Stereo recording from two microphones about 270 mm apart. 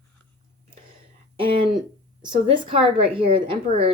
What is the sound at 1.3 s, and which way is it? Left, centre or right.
A woman's voice, centre.